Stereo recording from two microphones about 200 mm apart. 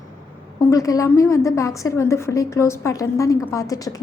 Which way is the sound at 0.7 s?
15° left (ahead or behind).